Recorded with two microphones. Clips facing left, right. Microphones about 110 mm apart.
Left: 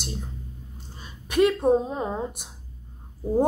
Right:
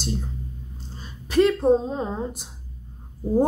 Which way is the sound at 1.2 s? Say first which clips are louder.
Right 2 dB; 15° left (ahead or behind).